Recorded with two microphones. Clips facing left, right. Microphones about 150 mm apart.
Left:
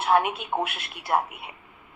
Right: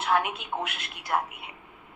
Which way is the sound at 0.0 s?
30° left (ahead or behind).